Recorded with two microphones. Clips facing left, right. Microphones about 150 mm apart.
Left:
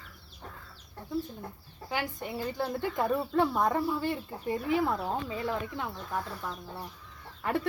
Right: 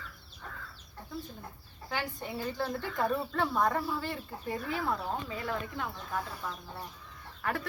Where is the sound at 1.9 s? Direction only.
15° left (ahead or behind).